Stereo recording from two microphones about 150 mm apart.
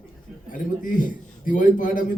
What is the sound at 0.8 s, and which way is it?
Speech, 65° left (ahead or behind).